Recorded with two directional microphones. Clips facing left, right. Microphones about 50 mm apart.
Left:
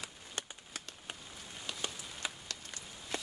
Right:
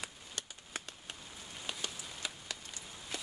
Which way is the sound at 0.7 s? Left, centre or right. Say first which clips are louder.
Right 2 dB; right.